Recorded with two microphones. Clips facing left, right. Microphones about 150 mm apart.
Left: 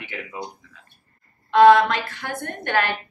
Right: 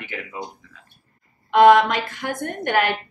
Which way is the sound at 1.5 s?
15° right (ahead or behind).